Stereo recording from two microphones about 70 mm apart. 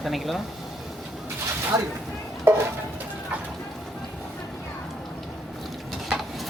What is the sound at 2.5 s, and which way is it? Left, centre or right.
Speech, right.